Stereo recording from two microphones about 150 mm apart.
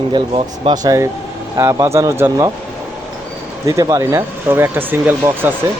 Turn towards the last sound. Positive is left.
turn(degrees=-15)  # may be behind; listen again after turning